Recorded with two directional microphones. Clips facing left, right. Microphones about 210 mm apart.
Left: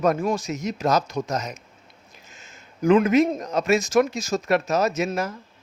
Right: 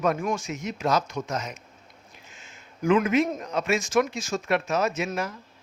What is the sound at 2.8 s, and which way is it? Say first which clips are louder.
Speech: left 4 dB; 40° left (ahead or behind).